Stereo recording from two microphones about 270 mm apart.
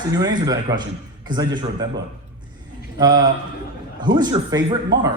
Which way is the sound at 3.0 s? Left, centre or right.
Centre.